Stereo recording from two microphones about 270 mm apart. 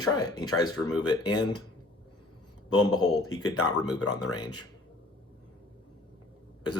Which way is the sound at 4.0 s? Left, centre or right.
Left.